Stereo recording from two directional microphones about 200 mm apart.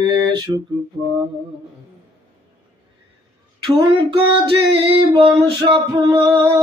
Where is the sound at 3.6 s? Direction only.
25° right (ahead or behind).